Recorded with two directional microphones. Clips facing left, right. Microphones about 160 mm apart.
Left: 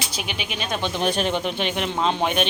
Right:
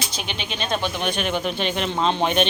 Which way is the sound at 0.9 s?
35° left (ahead or behind).